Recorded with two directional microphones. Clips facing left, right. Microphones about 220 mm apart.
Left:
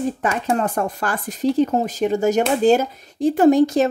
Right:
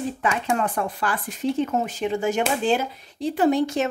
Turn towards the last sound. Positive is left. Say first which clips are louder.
# left 6 dB
turn(degrees=40)  # may be behind; listen again after turning